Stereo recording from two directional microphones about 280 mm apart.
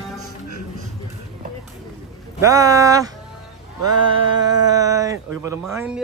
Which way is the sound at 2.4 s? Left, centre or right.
Centre.